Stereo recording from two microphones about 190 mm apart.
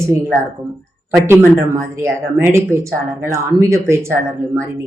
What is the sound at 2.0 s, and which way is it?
Speech, 15° right (ahead or behind).